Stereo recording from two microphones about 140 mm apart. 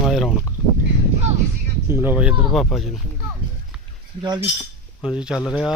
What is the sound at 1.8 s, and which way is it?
Speech, 15° right (ahead or behind).